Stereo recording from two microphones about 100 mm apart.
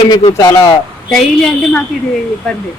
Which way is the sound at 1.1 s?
5° left (ahead or behind).